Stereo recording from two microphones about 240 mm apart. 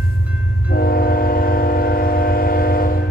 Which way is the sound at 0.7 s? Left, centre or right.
Left.